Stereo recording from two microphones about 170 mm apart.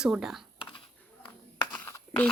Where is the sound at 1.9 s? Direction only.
15° left (ahead or behind).